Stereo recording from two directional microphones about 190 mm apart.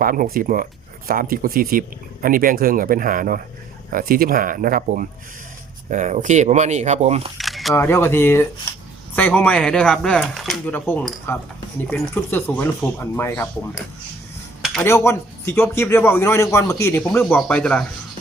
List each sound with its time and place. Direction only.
0.0 s speech: 50° right (ahead or behind)
7.3 s camera: centre (ahead or behind)
7.7 s a man's voice: 15° left (ahead or behind)
14.8 s a man's voice: 15° left (ahead or behind)